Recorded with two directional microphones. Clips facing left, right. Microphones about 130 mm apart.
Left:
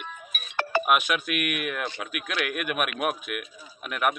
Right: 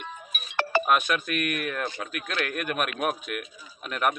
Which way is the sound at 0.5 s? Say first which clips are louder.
Right 1 dB; 90° right.